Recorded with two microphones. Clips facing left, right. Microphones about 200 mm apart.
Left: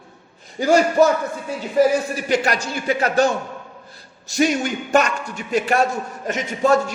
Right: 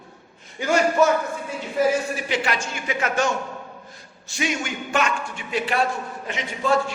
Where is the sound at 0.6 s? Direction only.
35° left (ahead or behind).